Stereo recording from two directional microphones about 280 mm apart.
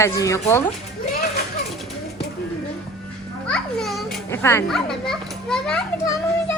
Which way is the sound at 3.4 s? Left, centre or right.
Centre.